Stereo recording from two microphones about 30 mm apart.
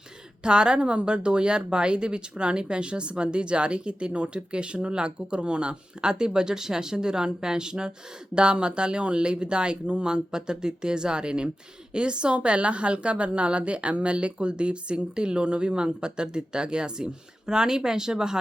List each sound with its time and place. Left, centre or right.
0.4 s speech: right